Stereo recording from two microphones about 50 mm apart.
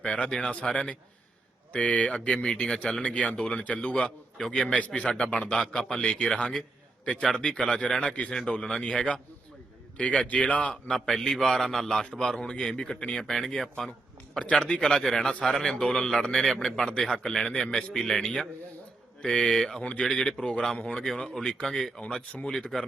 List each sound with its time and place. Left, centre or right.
0.0 s speech: left
0.3 s a man's voice: centre
0.5 s a man's voice: left
10.8 s a man's voice: centre
14.4 s a man's voice: centre
19.8 s speech: left
20.1 s a man's voice: centre
22.0 s speech: left